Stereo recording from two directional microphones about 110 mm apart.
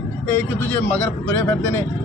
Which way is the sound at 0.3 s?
20° left (ahead or behind).